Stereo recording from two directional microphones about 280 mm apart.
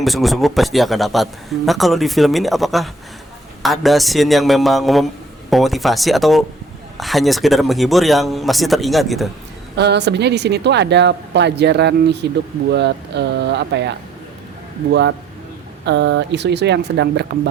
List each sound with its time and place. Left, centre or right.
0.0 s speech: centre
9.7 s speech: right
15.9 s speech: right